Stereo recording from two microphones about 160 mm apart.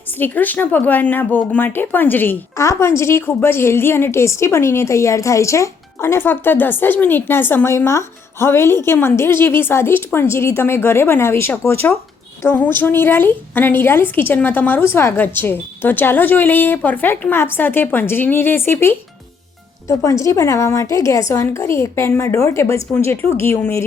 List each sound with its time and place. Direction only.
0.2 s speech: 10° left (ahead or behind)